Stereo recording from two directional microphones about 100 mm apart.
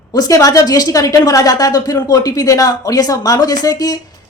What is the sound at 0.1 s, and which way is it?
A woman's voice, 35° left (ahead or behind).